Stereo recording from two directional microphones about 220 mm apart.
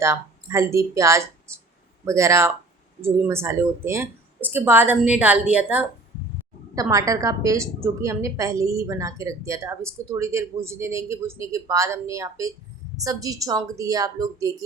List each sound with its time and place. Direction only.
0.0 s a woman's voice: 15° right (ahead or behind)